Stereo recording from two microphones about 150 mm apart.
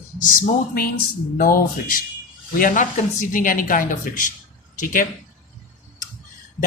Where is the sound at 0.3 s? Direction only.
75° left (ahead or behind).